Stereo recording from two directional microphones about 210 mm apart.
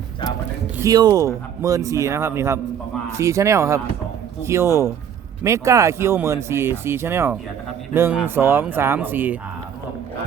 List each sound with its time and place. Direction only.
0.8 s speech: 20° right (ahead or behind)